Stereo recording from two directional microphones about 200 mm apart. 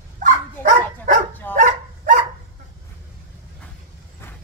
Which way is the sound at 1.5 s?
40° right (ahead or behind).